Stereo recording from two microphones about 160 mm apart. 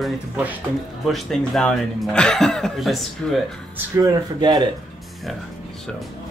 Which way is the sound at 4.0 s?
25° right (ahead or behind).